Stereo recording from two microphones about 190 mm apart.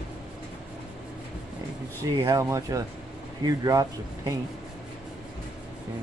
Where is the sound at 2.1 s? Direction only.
20° right (ahead or behind).